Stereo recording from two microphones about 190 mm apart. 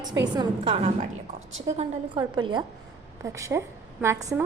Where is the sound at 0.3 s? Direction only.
30° right (ahead or behind).